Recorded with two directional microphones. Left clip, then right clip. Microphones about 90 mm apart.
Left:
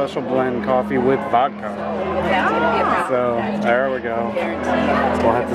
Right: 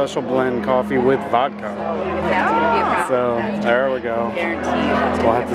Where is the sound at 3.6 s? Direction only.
20° right (ahead or behind).